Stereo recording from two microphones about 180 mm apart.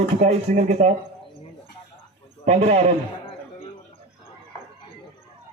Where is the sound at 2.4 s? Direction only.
35° right (ahead or behind).